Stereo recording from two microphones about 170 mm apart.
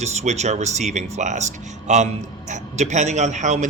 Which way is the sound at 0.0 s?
40° right (ahead or behind).